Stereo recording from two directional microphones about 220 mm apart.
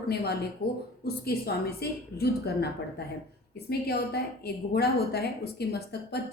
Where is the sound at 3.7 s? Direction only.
45° left (ahead or behind).